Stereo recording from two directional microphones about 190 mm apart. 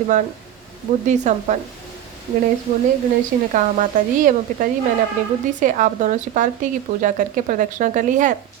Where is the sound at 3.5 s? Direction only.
40° right (ahead or behind).